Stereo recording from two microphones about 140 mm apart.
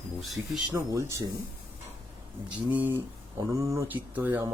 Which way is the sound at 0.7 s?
20° right (ahead or behind).